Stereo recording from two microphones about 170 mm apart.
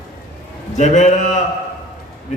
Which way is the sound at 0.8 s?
45° left (ahead or behind).